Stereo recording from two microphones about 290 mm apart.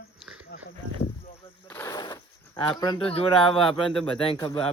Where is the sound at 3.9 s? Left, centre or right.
Centre.